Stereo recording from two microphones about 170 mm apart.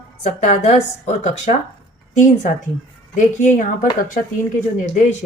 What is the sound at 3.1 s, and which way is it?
Speech, 45° left (ahead or behind).